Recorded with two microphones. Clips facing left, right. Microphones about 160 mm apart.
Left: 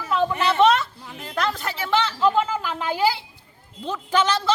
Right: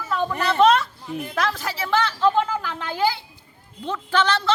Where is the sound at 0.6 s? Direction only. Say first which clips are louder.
Right 1 dB; centre (ahead or behind).